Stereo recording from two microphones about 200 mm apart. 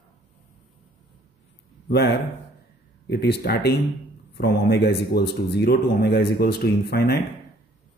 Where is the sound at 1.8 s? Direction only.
55° left (ahead or behind).